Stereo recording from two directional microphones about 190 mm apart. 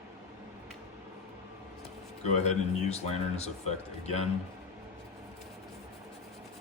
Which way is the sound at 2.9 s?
35° left (ahead or behind).